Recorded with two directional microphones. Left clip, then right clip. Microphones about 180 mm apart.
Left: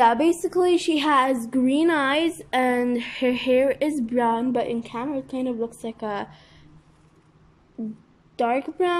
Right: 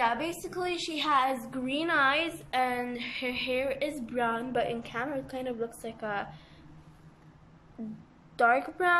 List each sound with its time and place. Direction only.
0.0 s a woman's voice: 50° left (ahead or behind); by 6.4 s 25° left (ahead or behind)
8.4 s a woman's voice: 15° left (ahead or behind)